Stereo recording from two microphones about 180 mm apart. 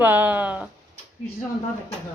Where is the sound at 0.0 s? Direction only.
10° right (ahead or behind).